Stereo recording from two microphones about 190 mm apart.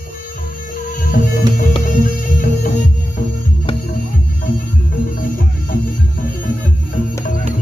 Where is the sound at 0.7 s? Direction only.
45° left (ahead or behind).